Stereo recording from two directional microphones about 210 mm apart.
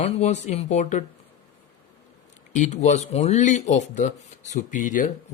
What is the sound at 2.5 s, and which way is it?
Speech, 35° left (ahead or behind).